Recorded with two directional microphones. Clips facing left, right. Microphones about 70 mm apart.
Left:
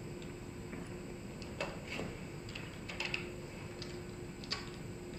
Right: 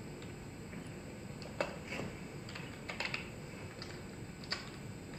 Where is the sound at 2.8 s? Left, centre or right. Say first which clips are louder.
Even; right.